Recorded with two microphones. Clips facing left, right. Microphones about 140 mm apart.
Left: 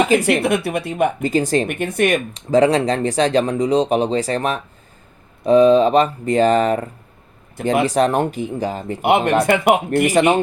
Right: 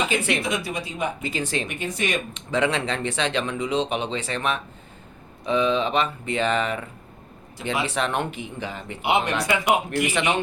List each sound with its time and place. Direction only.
0.1 s speech: 40° left (ahead or behind)
0.4 s speech: 60° left (ahead or behind)
1.2 s speech: 40° left (ahead or behind)
1.7 s speech: 55° left (ahead or behind)
2.3 s speech: 40° left (ahead or behind)
9.0 s speech: 55° left (ahead or behind)
10.1 s speech: 40° left (ahead or behind)